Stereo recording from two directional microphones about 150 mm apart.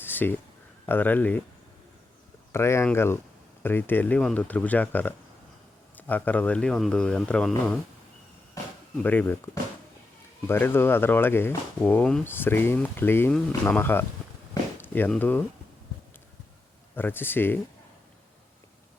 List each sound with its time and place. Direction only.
0.0 s a sound: 15° left (ahead or behind)
0.9 s speech: 10° left (ahead or behind)
2.5 s speech: 15° left (ahead or behind)
9.0 s speech: 10° left (ahead or behind)
16.9 s speech: 15° left (ahead or behind)